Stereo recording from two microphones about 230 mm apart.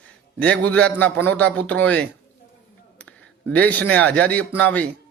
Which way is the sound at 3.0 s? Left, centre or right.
Centre.